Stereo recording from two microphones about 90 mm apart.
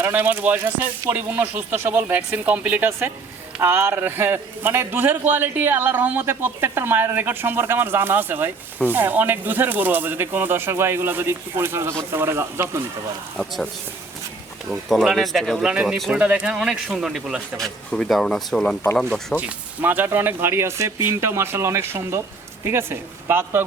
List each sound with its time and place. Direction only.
0.0 s a man's voice: 20° right (ahead or behind)
3.6 s a man's voice: 25° right (ahead or behind)
13.3 s speech: 5° left (ahead or behind)
14.8 s speech: centre (ahead or behind)
15.7 s speech: 15° right (ahead or behind); by 18.8 s 5° left (ahead or behind)
19.4 s a man's voice: 20° right (ahead or behind)